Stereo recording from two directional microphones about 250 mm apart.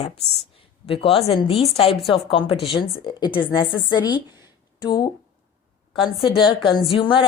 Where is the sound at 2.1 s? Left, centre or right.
Left.